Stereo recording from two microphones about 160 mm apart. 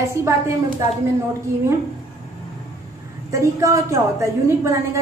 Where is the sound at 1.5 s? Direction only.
20° right (ahead or behind).